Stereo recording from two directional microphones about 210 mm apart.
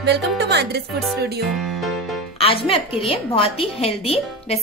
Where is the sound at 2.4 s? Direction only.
25° left (ahead or behind).